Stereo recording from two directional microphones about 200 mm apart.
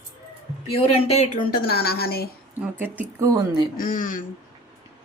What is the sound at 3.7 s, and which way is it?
Speech, 45° left (ahead or behind).